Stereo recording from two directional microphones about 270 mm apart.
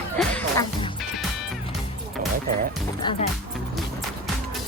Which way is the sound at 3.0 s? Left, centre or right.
Centre.